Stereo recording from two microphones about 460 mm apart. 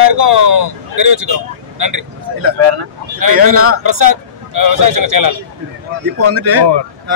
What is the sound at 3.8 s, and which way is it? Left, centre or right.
A man's voice, right.